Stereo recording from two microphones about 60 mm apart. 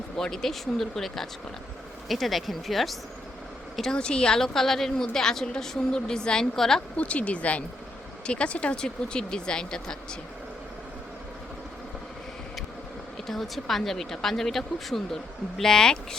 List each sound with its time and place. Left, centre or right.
0.2 s a woman's voice: centre
6.9 s a woman's voice: left
13.2 s speech: centre